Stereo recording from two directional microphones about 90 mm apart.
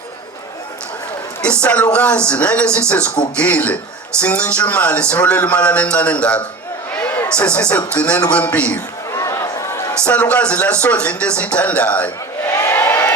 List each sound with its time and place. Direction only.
1.6 s speech: 15° left (ahead or behind)
6.9 s a sound: 15° left (ahead or behind)
7.9 s speech: 15° left (ahead or behind)
9.1 s a sound: 35° left (ahead or behind)
10.0 s speech: 15° left (ahead or behind)
12.5 s crowd: 30° left (ahead or behind)